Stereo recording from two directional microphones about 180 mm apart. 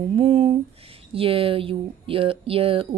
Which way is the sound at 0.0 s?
30° right (ahead or behind).